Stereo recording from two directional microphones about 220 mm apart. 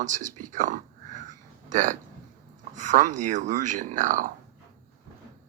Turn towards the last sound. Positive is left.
turn(degrees=-35)  # may be behind; listen again after turning